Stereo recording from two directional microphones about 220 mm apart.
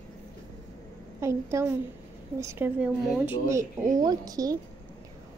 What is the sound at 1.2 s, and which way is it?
Speech, 10° right (ahead or behind).